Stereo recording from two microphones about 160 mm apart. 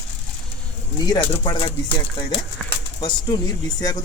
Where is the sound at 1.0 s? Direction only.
30° left (ahead or behind).